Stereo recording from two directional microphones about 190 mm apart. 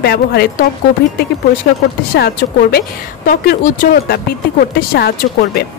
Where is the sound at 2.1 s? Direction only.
55° left (ahead or behind).